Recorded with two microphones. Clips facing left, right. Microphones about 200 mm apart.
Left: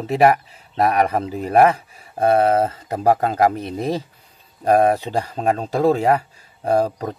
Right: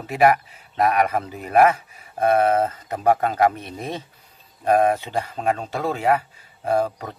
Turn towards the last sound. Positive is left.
turn(degrees=35)  # may be behind; listen again after turning